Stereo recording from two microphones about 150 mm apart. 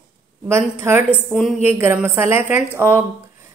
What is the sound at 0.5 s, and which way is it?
A woman's voice, 15° right (ahead or behind).